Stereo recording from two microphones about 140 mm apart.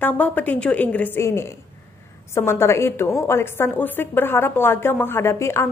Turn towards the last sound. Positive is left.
turn(degrees=20)  # may be behind; listen again after turning